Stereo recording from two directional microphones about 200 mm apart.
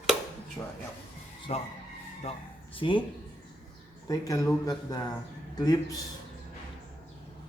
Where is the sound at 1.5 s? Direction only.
30° left (ahead or behind).